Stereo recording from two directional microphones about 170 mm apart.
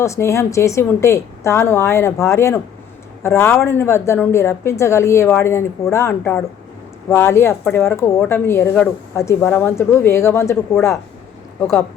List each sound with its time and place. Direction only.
0.0 s a woman's voice: 15° left (ahead or behind)